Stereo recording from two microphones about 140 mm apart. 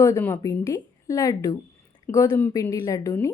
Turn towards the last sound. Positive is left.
turn(degrees=25)  # may be behind; listen again after turning